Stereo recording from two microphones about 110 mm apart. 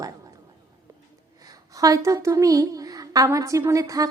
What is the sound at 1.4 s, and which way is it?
A woman's voice, 35° right (ahead or behind).